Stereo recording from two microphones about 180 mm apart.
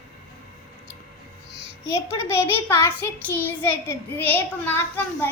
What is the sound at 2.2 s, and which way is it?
A child's voice, 15° left (ahead or behind).